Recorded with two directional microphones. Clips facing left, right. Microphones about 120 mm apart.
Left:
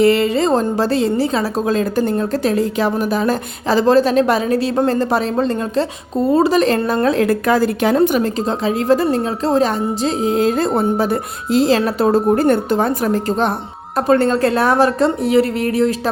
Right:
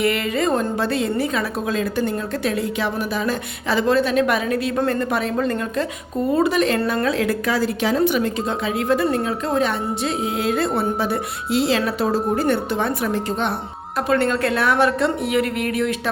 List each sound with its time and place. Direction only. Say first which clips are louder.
0.0 s a woman's voice: left 7 dB; 30° left (ahead or behind)
7.0 s a woman's voice: left 5 dB; 45° left (ahead or behind)